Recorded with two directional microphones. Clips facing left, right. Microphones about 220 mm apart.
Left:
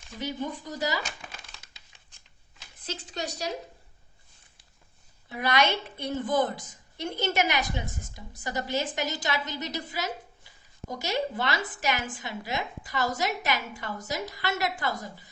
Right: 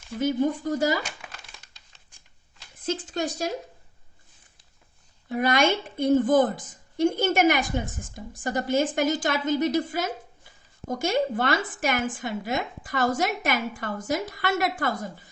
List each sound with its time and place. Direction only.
0.2 s a woman's voice: 45° right (ahead or behind)
2.8 s a woman's voice: 50° right (ahead or behind)
5.3 s a woman's voice: 50° right (ahead or behind)